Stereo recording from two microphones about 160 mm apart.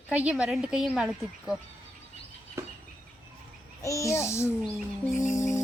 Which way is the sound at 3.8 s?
20° left (ahead or behind).